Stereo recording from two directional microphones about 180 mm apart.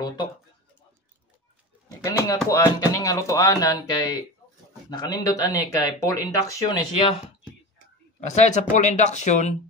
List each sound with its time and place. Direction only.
1.9 s speech: 20° left (ahead or behind)
8.2 s speech: 40° left (ahead or behind)